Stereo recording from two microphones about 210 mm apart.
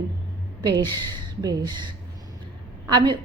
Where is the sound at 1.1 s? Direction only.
20° right (ahead or behind).